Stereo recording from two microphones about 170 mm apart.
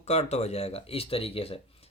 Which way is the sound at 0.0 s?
40° left (ahead or behind).